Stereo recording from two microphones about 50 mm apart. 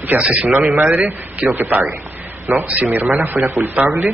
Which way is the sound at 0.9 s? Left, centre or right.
Right.